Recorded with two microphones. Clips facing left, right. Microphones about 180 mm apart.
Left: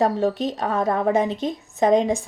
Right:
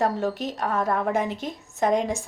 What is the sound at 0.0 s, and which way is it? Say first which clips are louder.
A woman's voice: left 4 dB; 20° left (ahead or behind).